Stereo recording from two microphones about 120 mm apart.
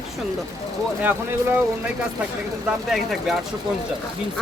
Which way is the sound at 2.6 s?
Centre (ahead or behind).